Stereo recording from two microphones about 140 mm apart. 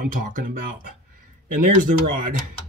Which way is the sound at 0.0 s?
80° right.